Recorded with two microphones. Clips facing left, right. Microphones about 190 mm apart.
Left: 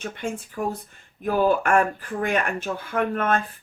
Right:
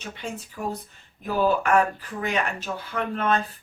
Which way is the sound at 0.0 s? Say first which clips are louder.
Left 4 dB; 50° left (ahead or behind).